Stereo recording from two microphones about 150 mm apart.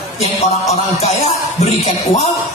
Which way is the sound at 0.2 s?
45° left (ahead or behind).